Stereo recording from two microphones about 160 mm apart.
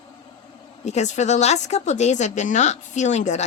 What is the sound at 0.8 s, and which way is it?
A woman's voice, 45° left (ahead or behind).